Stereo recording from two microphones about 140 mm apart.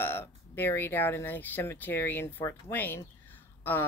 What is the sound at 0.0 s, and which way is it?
Speech, 15° left (ahead or behind).